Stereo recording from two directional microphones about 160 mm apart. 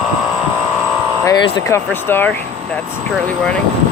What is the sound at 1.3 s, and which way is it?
Speech, 30° left (ahead or behind).